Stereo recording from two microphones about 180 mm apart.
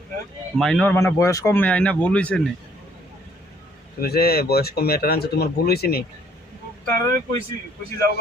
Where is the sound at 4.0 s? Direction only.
60° left (ahead or behind).